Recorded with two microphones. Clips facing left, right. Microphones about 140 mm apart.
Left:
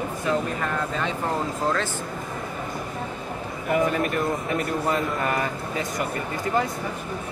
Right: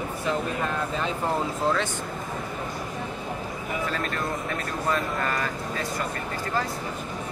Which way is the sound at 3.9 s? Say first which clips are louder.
Left 5 dB; 20° left (ahead or behind).